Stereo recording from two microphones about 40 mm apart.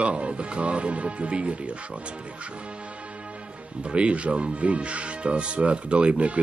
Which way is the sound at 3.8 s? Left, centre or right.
Right.